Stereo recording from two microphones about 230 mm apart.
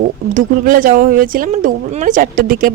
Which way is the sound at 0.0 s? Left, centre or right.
Right.